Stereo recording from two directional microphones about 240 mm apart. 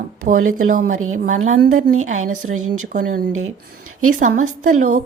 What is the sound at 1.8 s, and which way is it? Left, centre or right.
Speech, right.